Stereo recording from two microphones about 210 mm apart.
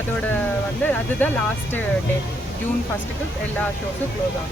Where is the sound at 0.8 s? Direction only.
10° left (ahead or behind).